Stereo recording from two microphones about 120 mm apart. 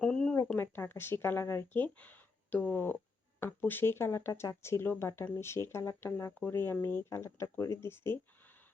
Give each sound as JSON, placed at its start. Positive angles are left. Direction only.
{"t": 0.0, "sound": "a sound", "side_deg": 5}
{"t": 0.5, "sound": "speech", "side_deg": 20}
{"t": 7.3, "sound": "speech", "side_deg": 30}